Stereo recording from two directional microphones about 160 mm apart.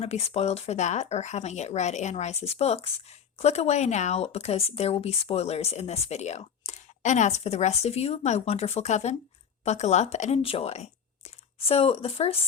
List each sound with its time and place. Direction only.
0.0 s speech: 40° left (ahead or behind)